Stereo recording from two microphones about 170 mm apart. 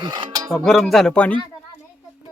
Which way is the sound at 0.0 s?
25° right (ahead or behind).